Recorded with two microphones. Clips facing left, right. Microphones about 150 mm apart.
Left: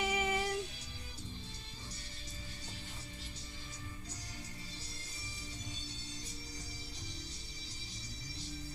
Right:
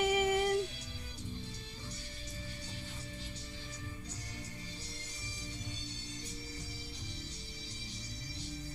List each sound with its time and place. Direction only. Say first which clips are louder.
0.0 s music: right 5 dB; 45° right (ahead or behind)